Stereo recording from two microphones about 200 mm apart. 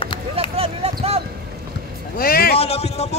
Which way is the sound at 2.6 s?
30° left (ahead or behind).